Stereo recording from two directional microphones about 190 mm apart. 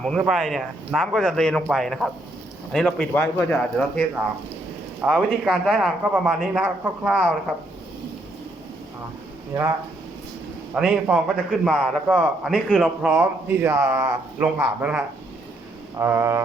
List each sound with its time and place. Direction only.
0.0 s speech: centre (ahead or behind)
4.9 s speech: 5° right (ahead or behind)
9.5 s a man's voice: 15° right (ahead or behind)
10.8 s a man's voice: 5° right (ahead or behind)